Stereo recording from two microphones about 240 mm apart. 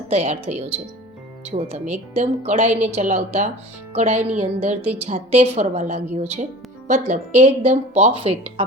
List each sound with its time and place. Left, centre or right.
0.1 s speech: right
1.7 s speech: right